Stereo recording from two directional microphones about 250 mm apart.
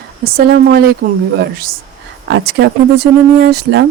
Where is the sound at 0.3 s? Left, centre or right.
Right.